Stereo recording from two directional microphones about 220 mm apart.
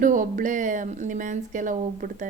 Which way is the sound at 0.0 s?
35° right (ahead or behind).